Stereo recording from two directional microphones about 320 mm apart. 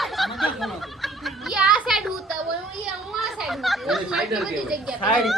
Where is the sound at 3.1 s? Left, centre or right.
Centre.